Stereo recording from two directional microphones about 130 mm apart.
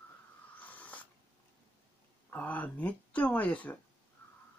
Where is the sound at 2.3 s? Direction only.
10° left (ahead or behind).